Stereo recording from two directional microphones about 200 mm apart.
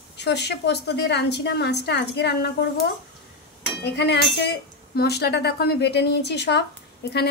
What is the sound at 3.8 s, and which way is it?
A woman's voice, 60° left (ahead or behind).